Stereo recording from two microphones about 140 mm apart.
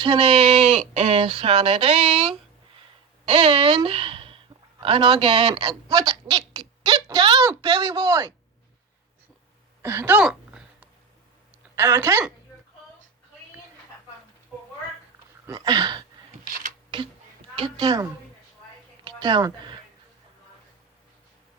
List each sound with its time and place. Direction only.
0.0 s a woman's voice: 40° right (ahead or behind)
5.9 s speech: 25° right (ahead or behind)
9.8 s speech: 15° right (ahead or behind)
10.2 s a sound: 5° right (ahead or behind)
11.7 s speech: 20° right (ahead or behind)
15.4 s a woman's voice: 30° right (ahead or behind)